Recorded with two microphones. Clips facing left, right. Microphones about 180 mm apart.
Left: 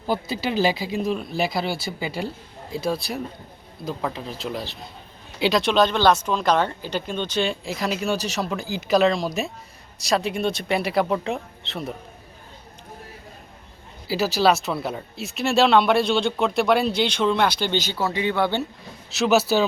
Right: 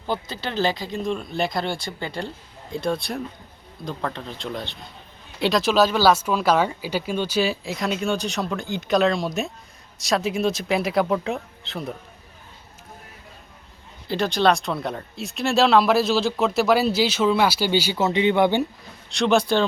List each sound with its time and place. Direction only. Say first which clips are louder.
0.1 s speech: left 3 dB; 10° left (ahead or behind)
14.1 s speech: even; 5° left (ahead or behind); by 18.0 s 10° right (ahead or behind)
18.0 s speech: right 5 dB; 20° right (ahead or behind)
19.1 s speech: even; 5° left (ahead or behind)